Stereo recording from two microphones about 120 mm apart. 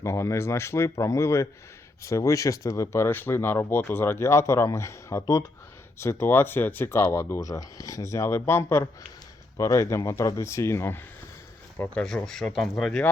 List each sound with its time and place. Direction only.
0.0 s speech: 25° left (ahead or behind)
12.0 s speech: 5° left (ahead or behind)